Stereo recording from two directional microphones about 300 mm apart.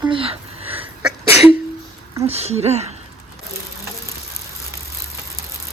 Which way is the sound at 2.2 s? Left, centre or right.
Right.